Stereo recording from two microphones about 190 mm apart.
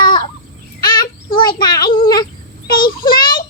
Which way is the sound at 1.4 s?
25° left (ahead or behind).